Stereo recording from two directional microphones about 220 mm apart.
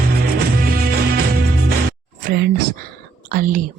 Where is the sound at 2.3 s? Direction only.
45° right (ahead or behind).